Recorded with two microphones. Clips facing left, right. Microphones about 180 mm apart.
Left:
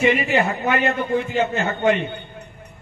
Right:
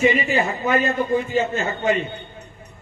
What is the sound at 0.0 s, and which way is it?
A man's voice, 65° left (ahead or behind).